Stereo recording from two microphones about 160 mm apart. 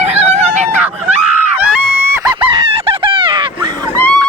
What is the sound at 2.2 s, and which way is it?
Fowl, 30° right (ahead or behind).